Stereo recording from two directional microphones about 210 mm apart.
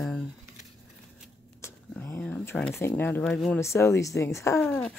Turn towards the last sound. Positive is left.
turn(degrees=5)  # may be behind; listen again after turning